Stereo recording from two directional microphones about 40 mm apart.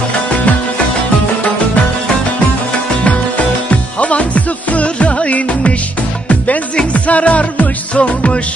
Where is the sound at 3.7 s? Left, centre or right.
Left.